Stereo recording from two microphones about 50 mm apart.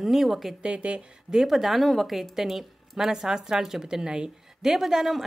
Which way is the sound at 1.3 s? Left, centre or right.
Centre.